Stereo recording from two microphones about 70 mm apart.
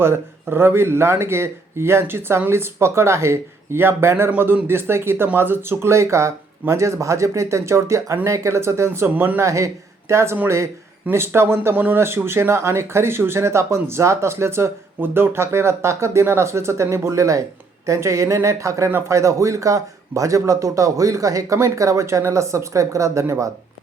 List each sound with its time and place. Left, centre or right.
0.0 s speech: right
9.4 s a man's voice: right